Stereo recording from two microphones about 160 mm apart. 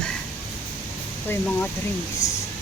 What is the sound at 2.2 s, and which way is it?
Speech, 45° left (ahead or behind).